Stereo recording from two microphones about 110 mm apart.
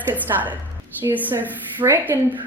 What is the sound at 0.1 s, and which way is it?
A woman's voice, 15° right (ahead or behind).